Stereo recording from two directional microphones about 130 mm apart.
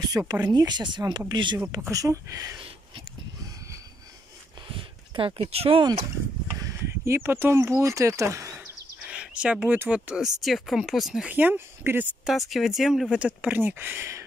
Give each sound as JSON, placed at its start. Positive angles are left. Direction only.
{"t": 0.3, "sound": "speech", "side_deg": -30}
{"t": 1.6, "sound": "speech", "side_deg": -20}
{"t": 4.6, "sound": "a sound", "side_deg": -40}
{"t": 7.1, "sound": "speech", "side_deg": -20}
{"t": 9.0, "sound": "speech", "side_deg": -10}
{"t": 12.4, "sound": "speech", "side_deg": 0}